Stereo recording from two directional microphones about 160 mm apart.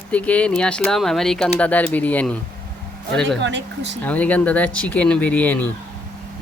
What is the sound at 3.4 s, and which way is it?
Speech, 90° right.